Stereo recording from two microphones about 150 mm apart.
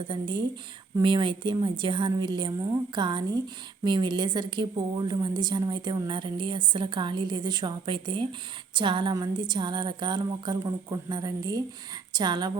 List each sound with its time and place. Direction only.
0.1 s a woman's voice: 30° right (ahead or behind)